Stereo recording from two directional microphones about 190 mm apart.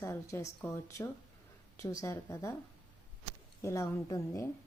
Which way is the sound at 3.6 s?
15° left (ahead or behind).